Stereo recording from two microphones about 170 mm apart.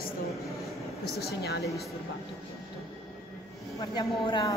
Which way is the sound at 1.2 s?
70° left (ahead or behind).